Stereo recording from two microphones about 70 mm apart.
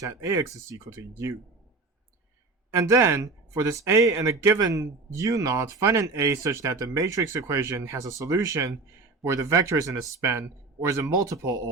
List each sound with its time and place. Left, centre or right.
0.0 s speech: right
2.7 s speech: right